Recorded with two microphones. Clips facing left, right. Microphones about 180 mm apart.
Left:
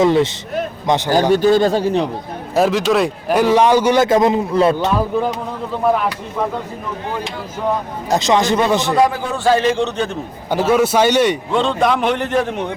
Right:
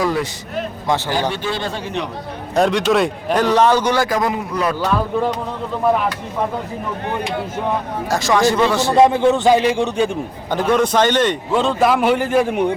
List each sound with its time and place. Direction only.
0.0 s a man's voice: 25° left (ahead or behind)
1.3 s speech: 45° left (ahead or behind)
2.6 s a man's voice: centre (ahead or behind)
4.0 s a man's voice: 25° left (ahead or behind)
8.1 s a man's voice: 20° left (ahead or behind)
9.0 s a man's voice: 25° right (ahead or behind)
10.5 s a man's voice: 5° left (ahead or behind)
11.5 s a man's voice: 5° right (ahead or behind)